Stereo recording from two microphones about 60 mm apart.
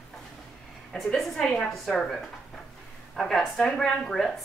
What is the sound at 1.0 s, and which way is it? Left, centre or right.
A woman's voice, centre.